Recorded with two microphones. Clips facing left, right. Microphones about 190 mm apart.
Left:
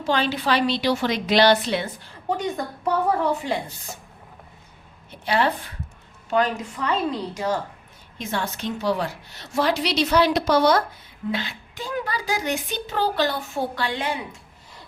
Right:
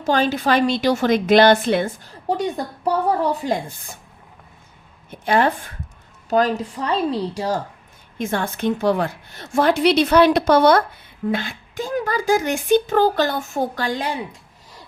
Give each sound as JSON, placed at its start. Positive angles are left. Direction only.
{"t": 0.0, "sound": "a woman's voice", "side_deg": -45}
{"t": 5.2, "sound": "a woman's voice", "side_deg": -50}
{"t": 6.3, "sound": "a woman's voice", "side_deg": -35}
{"t": 8.2, "sound": "a woman's voice", "side_deg": -50}